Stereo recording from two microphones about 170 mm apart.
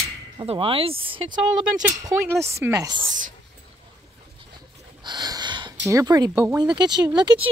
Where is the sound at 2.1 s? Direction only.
15° right (ahead or behind).